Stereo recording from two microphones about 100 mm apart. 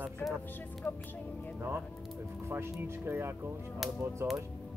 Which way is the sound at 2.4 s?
25° right (ahead or behind).